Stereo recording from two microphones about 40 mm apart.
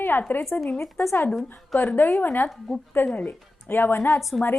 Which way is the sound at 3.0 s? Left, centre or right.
Left.